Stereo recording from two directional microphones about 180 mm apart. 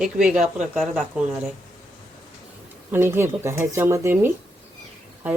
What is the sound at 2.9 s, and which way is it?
Speech, 15° right (ahead or behind).